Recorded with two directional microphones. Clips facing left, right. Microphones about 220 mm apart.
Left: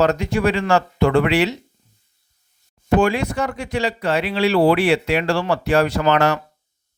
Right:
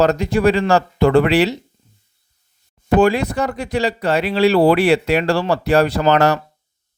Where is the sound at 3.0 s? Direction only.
35° right (ahead or behind).